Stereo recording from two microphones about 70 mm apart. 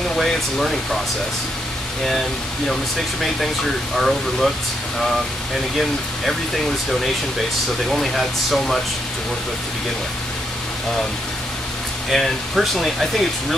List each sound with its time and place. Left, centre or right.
0.2 s speech: centre
2.7 s speech: centre
7.9 s speech: centre
12.1 s speech: centre